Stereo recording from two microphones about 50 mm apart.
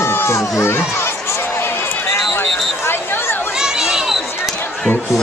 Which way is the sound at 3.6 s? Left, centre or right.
Centre.